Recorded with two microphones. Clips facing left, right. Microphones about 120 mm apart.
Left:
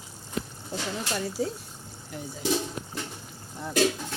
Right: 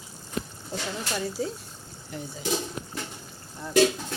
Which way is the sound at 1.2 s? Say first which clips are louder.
Even; 5° left (ahead or behind).